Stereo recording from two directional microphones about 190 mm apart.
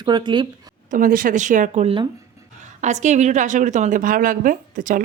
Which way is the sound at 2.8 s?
40° right (ahead or behind).